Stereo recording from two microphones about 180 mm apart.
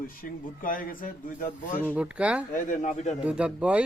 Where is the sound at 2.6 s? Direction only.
45° left (ahead or behind).